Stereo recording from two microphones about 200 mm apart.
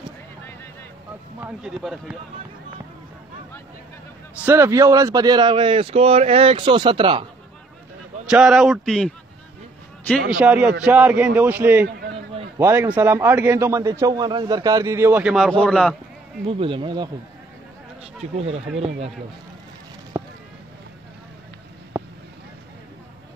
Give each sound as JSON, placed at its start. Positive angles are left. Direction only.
{"t": 1.4, "sound": "a man's voice", "side_deg": -5}
{"t": 4.5, "sound": "speech", "side_deg": -15}
{"t": 8.3, "sound": "a man's voice", "side_deg": -5}
{"t": 10.4, "sound": "a man's voice", "side_deg": -5}
{"t": 16.4, "sound": "speech", "side_deg": -25}
{"t": 18.2, "sound": "speech", "side_deg": -35}
{"t": 20.1, "sound": "a sound", "side_deg": -20}
{"t": 21.9, "sound": "vehicle", "side_deg": -10}